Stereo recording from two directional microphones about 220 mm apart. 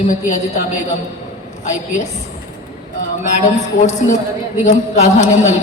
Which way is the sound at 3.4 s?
30° left (ahead or behind).